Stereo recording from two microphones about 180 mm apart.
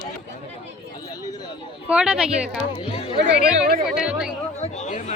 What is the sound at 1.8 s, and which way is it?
Speech, 5° right (ahead or behind).